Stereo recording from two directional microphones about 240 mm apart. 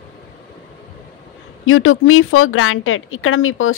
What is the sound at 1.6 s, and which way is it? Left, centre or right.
Speech, left.